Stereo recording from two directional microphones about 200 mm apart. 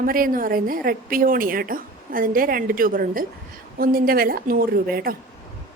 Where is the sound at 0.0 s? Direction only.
45° right (ahead or behind).